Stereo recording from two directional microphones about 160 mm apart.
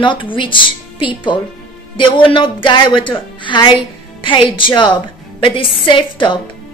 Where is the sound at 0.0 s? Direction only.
30° left (ahead or behind).